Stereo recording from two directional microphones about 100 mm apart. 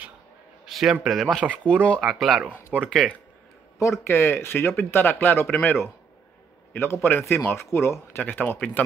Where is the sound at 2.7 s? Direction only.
10° left (ahead or behind).